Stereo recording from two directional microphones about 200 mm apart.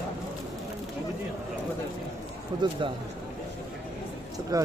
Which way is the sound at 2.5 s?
20° right (ahead or behind).